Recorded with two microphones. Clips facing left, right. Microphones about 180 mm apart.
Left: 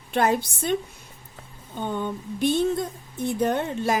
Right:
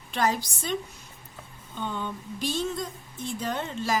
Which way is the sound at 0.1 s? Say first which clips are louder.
Left 4 dB; 55° left (ahead or behind).